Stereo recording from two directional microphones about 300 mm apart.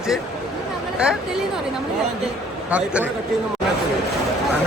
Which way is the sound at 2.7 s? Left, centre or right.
Centre.